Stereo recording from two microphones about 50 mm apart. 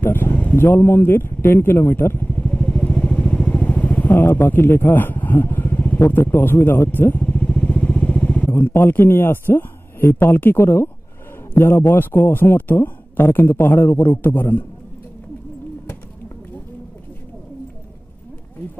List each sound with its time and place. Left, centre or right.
0.0 s vehicle: left
0.6 s a man's voice: left
2.3 s vehicle: left
6.2 s a man's voice: left
7.2 s vehicle: left
7.4 s motorcycle: left
8.5 s a man's voice: left